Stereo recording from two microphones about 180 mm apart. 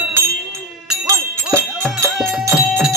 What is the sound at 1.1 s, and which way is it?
Music, 15° right (ahead or behind).